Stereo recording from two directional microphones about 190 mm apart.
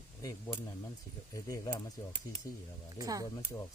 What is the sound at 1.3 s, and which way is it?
Speech, 20° left (ahead or behind).